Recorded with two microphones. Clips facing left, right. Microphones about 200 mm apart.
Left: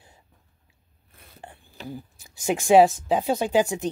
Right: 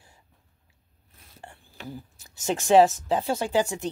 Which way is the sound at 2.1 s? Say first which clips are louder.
Left 2 dB; 15° left (ahead or behind).